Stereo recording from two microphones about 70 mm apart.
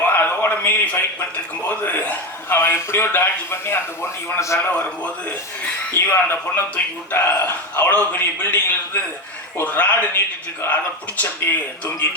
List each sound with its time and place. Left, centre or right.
0.0 s a sound: left
1.6 s a man's voice: left
4.7 s a man's voice: left